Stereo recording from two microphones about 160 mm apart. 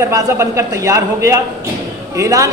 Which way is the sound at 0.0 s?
20° right (ahead or behind).